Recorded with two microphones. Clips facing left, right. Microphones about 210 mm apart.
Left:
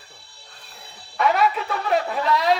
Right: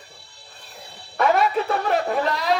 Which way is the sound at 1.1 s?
50° right (ahead or behind).